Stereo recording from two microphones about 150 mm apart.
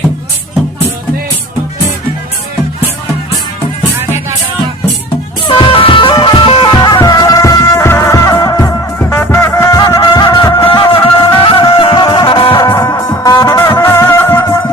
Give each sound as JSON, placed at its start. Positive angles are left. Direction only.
{"t": 5.5, "sound": "music", "side_deg": 35}
{"t": 12.5, "sound": "music", "side_deg": 25}